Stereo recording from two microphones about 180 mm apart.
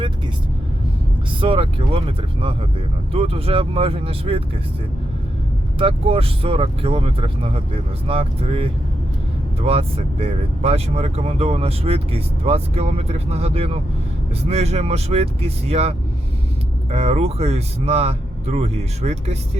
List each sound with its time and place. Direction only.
1.4 s speech: 30° right (ahead or behind)
5.8 s speech: 30° right (ahead or behind)